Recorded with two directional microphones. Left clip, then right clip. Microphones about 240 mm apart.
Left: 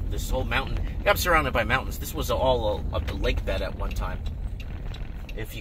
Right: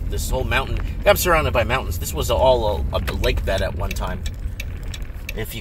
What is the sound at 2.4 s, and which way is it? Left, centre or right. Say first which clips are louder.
Speech: right 7 dB; right.